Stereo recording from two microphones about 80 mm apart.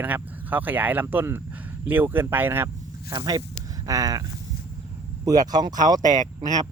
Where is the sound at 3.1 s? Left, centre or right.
Right.